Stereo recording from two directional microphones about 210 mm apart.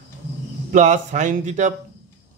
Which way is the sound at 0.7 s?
35° right (ahead or behind).